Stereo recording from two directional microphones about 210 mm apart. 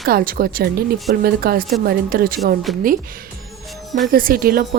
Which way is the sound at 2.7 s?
Centre (ahead or behind).